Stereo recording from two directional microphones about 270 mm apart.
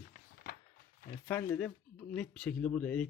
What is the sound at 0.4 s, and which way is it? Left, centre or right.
Mechanisms, left.